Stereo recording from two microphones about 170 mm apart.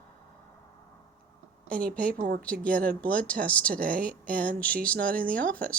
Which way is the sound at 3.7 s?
55° right (ahead or behind).